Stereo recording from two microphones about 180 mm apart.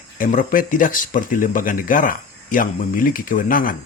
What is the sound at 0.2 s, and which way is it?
Speech, 50° left (ahead or behind).